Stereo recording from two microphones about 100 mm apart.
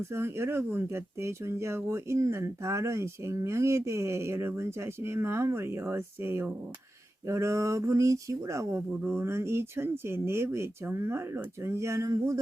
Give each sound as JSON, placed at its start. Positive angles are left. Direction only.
{"t": 0.1, "sound": "speech", "side_deg": -25}
{"t": 8.9, "sound": "speech", "side_deg": -20}